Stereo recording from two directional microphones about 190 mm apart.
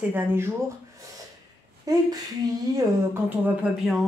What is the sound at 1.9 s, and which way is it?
Speech, 20° right (ahead or behind).